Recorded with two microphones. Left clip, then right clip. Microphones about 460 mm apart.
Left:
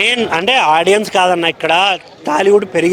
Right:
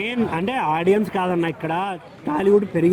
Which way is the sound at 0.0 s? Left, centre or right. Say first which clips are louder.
Left 11 dB; left.